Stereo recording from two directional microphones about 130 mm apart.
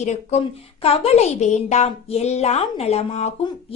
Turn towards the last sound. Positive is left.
turn(degrees=55)  # may be behind; listen again after turning